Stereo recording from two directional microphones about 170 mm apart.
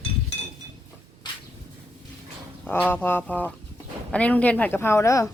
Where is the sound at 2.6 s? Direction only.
10° left (ahead or behind).